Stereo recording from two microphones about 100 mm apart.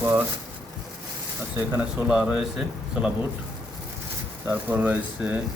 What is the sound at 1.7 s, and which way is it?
A man's voice, 10° right (ahead or behind).